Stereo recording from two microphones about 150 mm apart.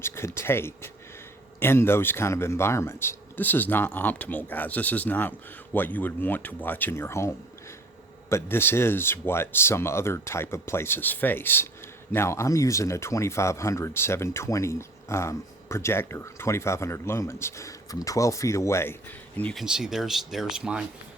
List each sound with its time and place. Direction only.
0.0 s speech: 15° left (ahead or behind)
19.5 s speech: 5° right (ahead or behind)